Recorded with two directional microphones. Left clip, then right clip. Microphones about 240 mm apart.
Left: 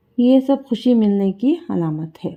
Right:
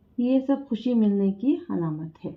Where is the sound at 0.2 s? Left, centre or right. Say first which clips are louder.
Left 9 dB; left.